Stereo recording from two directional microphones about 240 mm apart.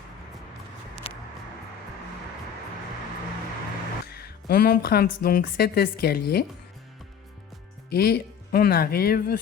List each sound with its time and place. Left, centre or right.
1.0 s music: left
4.0 s speech: left
7.9 s speech: left